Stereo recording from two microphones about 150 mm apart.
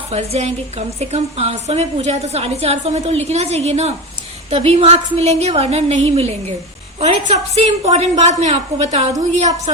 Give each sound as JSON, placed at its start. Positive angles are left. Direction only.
{"t": 0.1, "sound": "a woman's voice", "side_deg": -45}